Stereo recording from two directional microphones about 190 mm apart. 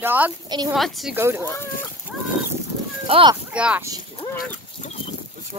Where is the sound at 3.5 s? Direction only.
5° right (ahead or behind).